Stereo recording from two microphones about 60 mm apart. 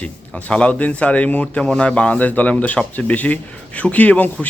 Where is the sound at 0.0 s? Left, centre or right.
Left.